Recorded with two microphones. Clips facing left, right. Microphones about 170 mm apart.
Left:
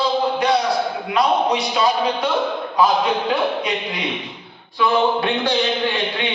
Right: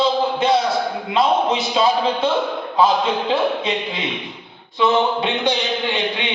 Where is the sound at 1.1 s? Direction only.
25° right (ahead or behind).